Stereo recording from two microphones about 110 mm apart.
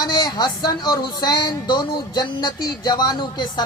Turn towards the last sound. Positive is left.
turn(degrees=40)  # may be behind; listen again after turning